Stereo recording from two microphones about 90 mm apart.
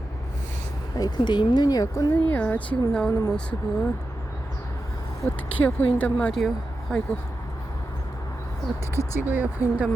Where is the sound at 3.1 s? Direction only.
30° left (ahead or behind).